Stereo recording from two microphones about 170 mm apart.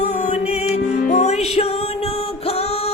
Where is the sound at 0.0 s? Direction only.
40° left (ahead or behind).